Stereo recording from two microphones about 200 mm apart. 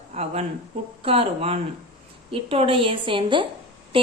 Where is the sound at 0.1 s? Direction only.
30° right (ahead or behind).